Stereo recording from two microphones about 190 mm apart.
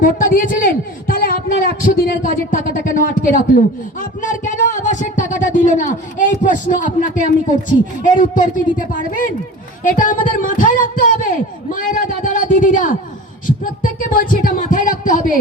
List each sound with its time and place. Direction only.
0.0 s a man's voice: 45° left (ahead or behind)
14.1 s speech: 45° left (ahead or behind)